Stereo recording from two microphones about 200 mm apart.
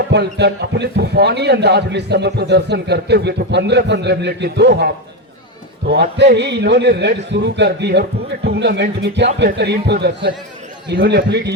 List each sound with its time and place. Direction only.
0.1 s a man's voice: 55° right (ahead or behind)
5.9 s a man's voice: 55° right (ahead or behind)